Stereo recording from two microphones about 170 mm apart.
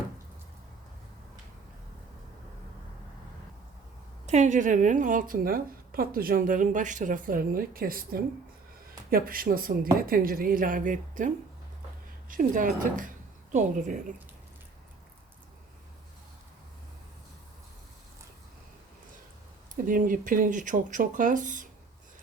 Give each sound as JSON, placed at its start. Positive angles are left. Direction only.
{"t": 4.3, "sound": "a woman's voice", "side_deg": -45}
{"t": 12.3, "sound": "a woman's voice", "side_deg": -55}
{"t": 19.7, "sound": "speech", "side_deg": -55}